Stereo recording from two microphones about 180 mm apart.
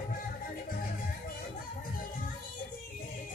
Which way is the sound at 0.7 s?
55° left (ahead or behind).